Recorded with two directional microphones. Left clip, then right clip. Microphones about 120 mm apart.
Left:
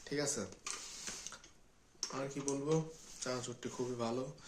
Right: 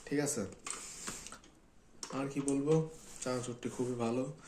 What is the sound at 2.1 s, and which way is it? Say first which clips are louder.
Speech: right 4 dB; 15° left (ahead or behind).